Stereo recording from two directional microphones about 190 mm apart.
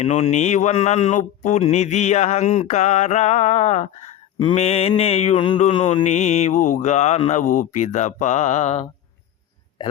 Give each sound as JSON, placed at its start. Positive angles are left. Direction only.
{"t": 0.0, "sound": "mantra", "side_deg": 35}